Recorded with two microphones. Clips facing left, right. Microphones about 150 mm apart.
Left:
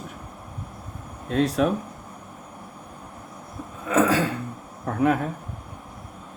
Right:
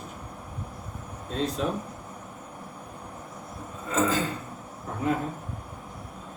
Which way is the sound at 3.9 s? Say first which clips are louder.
Left 5 dB; 70° left (ahead or behind).